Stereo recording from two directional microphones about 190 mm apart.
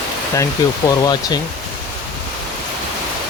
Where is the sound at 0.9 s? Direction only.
20° left (ahead or behind).